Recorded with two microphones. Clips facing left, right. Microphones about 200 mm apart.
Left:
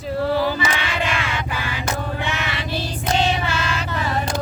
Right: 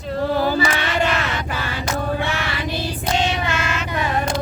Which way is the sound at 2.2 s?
15° left (ahead or behind).